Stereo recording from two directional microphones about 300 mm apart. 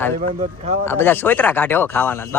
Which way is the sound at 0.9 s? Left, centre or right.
Centre.